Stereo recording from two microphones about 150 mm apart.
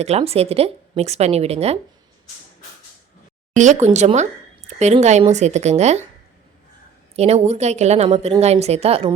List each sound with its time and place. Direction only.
0.0 s speech: 45° right (ahead or behind)
3.5 s speech: 55° right (ahead or behind)
7.2 s speech: 45° right (ahead or behind)